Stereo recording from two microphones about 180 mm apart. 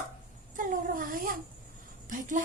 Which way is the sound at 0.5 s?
50° right (ahead or behind).